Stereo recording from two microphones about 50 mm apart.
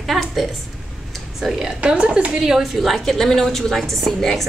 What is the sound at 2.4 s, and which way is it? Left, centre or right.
Speech, centre.